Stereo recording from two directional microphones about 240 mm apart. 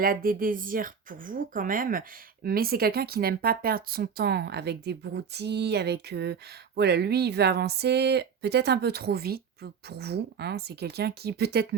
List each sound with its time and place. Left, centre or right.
0.0 s speech: right